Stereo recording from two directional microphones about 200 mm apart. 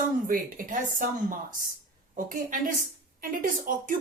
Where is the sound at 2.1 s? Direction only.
45° right (ahead or behind).